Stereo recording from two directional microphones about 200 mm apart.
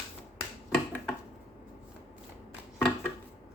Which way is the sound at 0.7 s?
Centre (ahead or behind).